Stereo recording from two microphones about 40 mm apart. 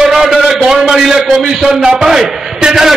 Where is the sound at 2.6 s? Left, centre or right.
Right.